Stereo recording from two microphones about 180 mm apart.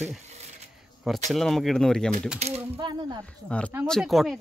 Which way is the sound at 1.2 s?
Centre (ahead or behind).